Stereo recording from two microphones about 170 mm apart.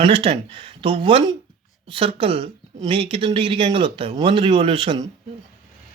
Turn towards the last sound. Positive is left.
turn(degrees=-30)  # may be behind; listen again after turning